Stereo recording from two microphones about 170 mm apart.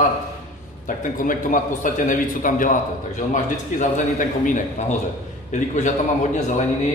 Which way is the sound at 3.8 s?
50° left (ahead or behind).